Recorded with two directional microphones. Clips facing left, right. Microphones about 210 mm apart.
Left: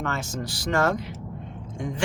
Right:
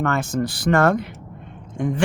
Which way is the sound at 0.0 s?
55° right (ahead or behind).